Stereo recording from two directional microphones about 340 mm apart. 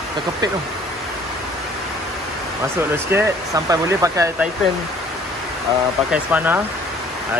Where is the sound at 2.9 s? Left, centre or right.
Centre.